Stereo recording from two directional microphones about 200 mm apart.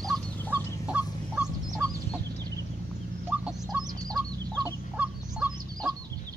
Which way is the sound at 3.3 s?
10° right (ahead or behind).